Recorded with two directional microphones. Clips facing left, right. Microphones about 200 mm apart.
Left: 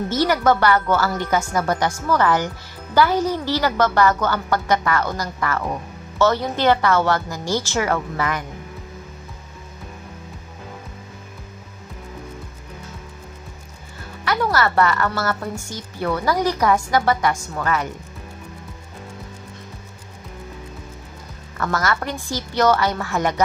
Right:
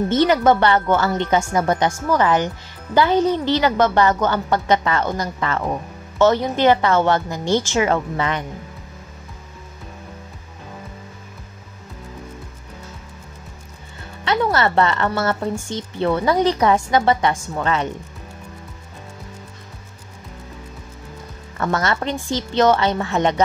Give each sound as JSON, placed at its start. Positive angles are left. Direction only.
{"t": 0.1, "sound": "a woman's voice", "side_deg": -20}
{"t": 14.2, "sound": "a woman's voice", "side_deg": -25}
{"t": 21.5, "sound": "a woman's voice", "side_deg": -25}